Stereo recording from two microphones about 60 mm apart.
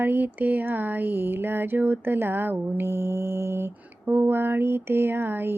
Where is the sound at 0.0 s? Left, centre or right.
Right.